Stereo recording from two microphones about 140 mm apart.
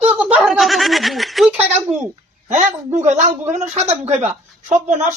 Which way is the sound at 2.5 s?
55° right (ahead or behind).